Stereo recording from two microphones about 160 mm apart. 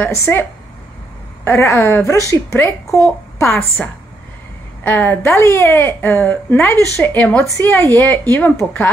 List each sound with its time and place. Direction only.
0.0 s a woman's voice: 15° left (ahead or behind)
4.8 s speech: 15° left (ahead or behind)